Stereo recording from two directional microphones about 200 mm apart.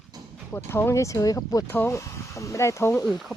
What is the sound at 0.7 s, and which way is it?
Speech, 10° left (ahead or behind).